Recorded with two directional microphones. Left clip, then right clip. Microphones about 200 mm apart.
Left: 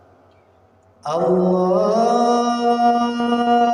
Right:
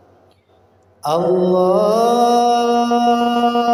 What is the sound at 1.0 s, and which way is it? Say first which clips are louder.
Mantra: right 2 dB; 45° right (ahead or behind).